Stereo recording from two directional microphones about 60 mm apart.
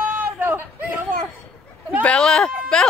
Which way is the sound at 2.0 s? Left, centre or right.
Centre.